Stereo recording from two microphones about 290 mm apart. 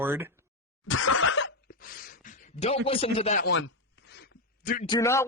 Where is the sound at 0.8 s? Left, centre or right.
Left.